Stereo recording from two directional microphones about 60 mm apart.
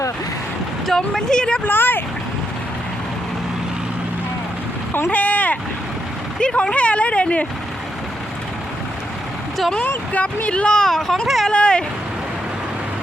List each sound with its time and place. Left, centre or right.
0.9 s speech: centre
1.6 s speech: left
5.1 s speech: left
6.4 s speech: centre
10.4 s speech: centre